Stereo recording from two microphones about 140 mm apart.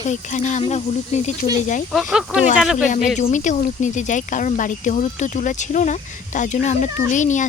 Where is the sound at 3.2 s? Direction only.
60° left (ahead or behind).